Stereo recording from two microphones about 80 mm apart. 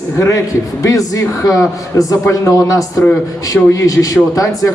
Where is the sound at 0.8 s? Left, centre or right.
Left.